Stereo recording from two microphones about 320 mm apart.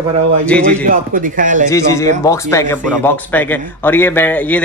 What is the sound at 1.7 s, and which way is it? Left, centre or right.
Speech, centre.